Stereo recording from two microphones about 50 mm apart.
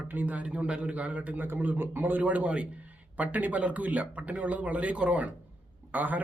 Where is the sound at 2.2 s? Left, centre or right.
Right.